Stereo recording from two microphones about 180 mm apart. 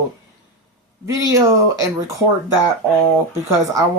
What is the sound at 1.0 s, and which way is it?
Speech, 20° right (ahead or behind).